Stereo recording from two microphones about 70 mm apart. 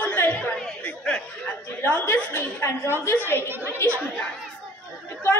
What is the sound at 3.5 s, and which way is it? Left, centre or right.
Speech, right.